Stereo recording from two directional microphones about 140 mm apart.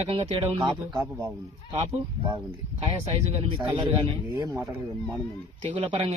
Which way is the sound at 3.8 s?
30° right (ahead or behind).